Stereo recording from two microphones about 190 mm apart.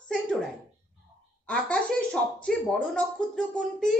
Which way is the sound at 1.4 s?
5° left (ahead or behind).